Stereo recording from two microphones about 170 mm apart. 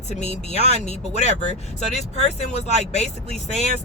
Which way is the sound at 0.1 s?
40° left (ahead or behind).